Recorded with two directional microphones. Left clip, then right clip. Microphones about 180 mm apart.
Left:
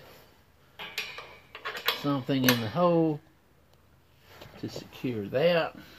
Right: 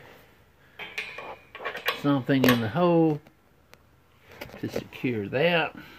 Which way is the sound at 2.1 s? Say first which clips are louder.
Right 5 dB; 45° right (ahead or behind).